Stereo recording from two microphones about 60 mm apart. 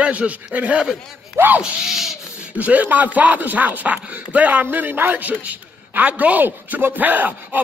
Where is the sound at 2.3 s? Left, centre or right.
Right.